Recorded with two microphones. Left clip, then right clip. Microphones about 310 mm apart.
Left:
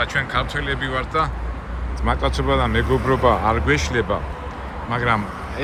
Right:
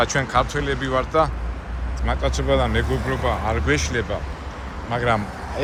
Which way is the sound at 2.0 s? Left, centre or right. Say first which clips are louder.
Left 3 dB; centre.